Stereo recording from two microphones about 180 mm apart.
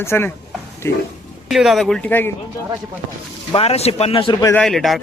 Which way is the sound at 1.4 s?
Centre (ahead or behind).